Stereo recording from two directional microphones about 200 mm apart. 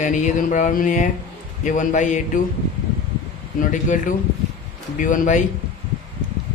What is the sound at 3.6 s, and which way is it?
A man's voice, 40° left (ahead or behind).